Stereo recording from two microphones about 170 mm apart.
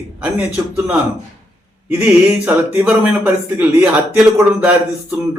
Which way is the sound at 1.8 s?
10° right (ahead or behind).